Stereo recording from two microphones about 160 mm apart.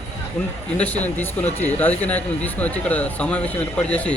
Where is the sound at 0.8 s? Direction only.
10° left (ahead or behind).